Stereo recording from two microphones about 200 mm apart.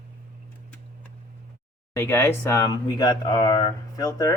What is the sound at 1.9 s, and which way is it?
Speech, 10° left (ahead or behind).